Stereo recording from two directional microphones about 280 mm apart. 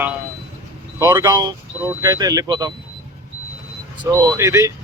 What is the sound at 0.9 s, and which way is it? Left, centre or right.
Speech, centre.